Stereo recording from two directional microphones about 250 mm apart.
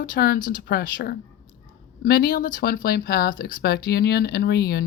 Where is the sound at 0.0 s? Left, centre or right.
Left.